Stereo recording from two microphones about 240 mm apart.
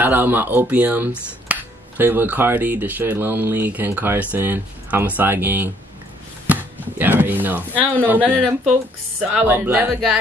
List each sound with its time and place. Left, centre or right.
0.0 s speech: centre